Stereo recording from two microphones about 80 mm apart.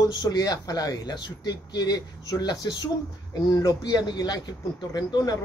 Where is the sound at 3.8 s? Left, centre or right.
Left.